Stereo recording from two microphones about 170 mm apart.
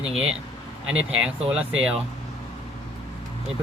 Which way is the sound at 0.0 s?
5° right (ahead or behind).